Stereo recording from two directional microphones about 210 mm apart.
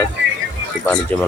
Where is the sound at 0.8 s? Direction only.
5° left (ahead or behind).